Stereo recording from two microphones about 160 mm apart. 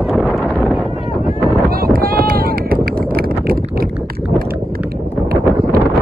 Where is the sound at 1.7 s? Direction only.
65° right (ahead or behind).